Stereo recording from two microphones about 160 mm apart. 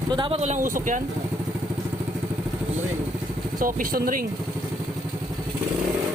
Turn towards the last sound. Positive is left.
turn(degrees=-65)  # may be behind; listen again after turning